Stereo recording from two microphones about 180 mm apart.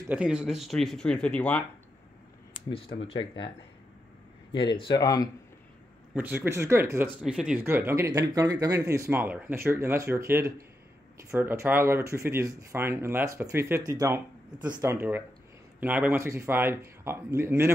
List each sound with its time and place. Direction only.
0.1 s speech: 5° right (ahead or behind)
2.7 s speech: 30° left (ahead or behind)
4.5 s speech: 25° left (ahead or behind)
6.1 s speech: 10° right (ahead or behind)